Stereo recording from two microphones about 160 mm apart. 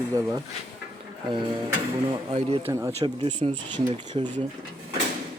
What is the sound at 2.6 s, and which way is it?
Speech, 15° right (ahead or behind).